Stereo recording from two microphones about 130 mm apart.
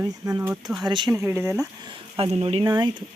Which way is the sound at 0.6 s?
Centre (ahead or behind).